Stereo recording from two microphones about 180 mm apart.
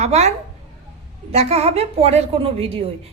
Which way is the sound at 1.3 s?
35° right (ahead or behind).